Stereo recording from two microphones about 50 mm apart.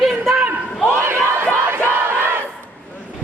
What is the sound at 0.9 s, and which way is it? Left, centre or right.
Crowd, right.